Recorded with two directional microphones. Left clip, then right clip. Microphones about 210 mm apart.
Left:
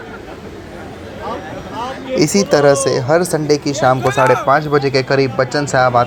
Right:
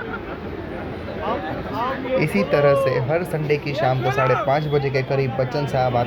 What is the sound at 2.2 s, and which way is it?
A woman's voice, 20° left (ahead or behind).